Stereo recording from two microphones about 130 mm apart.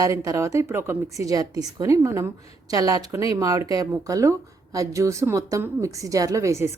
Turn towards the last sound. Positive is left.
turn(degrees=-25)  # may be behind; listen again after turning